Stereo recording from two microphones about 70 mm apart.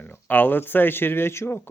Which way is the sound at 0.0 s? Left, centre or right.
Left.